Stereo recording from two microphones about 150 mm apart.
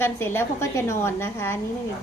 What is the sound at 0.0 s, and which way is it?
A woman's voice, 15° left (ahead or behind).